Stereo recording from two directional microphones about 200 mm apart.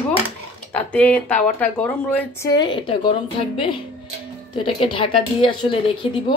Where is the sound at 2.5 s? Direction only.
25° left (ahead or behind).